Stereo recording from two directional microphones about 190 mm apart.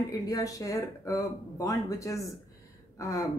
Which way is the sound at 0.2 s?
20° left (ahead or behind).